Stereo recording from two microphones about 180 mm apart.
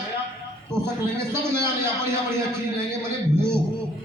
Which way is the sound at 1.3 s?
15° right (ahead or behind).